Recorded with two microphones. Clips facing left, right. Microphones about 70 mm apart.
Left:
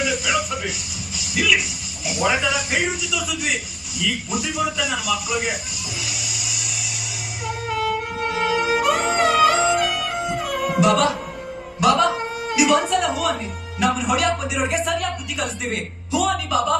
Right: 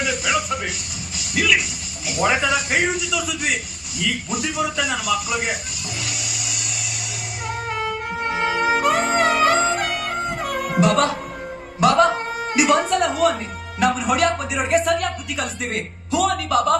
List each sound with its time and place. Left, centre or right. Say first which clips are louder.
0.0 s music: even; centre
2.0 s a man's voice: right 1 dB; centre
6.1 s music: right 1 dB; centre
8.3 s music: right 1 dB; right
11.8 s a sound: right 2 dB; right
13.0 s music: right 3 dB; centre
13.8 s a man's voice: right 1 dB; centre
16.2 s music: right 2 dB; centre